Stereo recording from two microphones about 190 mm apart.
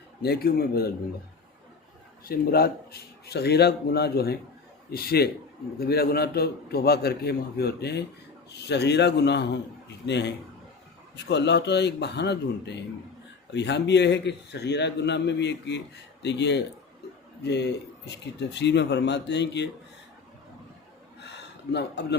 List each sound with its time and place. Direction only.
0.2 s a man's voice: 55° left (ahead or behind)
2.2 s a man's voice: 55° left (ahead or behind)
21.2 s a sound: 65° left (ahead or behind)